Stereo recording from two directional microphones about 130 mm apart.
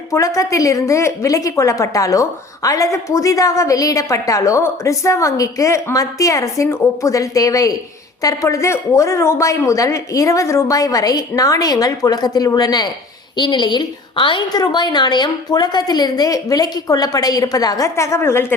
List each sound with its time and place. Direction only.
0.1 s a woman's voice: 25° left (ahead or behind)